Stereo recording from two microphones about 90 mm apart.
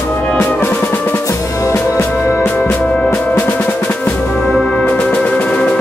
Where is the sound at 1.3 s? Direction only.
40° left (ahead or behind).